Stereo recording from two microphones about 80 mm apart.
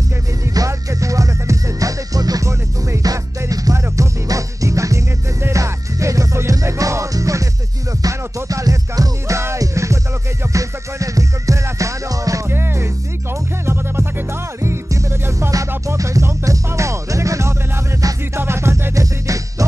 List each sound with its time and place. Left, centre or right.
0.6 s music: right
9.4 s music: right
12.4 s music: right
14.6 s music: right